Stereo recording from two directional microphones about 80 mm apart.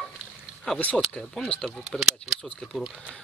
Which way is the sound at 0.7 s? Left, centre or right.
Centre.